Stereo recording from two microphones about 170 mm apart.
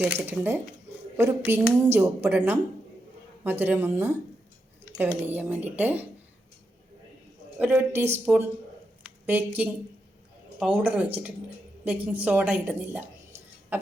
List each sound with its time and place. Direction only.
0.0 s a woman's voice: 10° right (ahead or behind)
5.2 s a woman's voice: 10° right (ahead or behind)
7.6 s a woman's voice: 10° right (ahead or behind)